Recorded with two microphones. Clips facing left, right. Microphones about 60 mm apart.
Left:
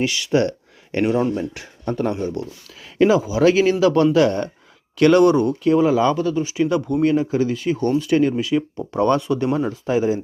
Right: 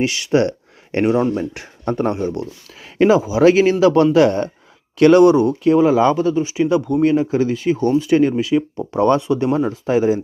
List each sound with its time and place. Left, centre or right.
0.0 s speech: right
2.0 s speech: right; by 5.5 s centre
5.6 s speech: right; by 7.0 s centre
7.0 s speech: right